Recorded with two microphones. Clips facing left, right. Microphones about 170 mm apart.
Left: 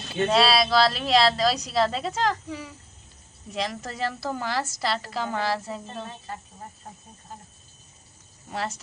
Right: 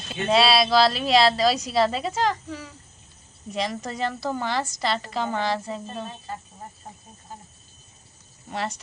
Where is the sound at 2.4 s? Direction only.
15° left (ahead or behind).